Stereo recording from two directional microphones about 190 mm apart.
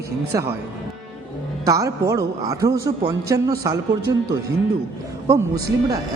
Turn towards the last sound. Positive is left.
turn(degrees=-20)  # may be behind; listen again after turning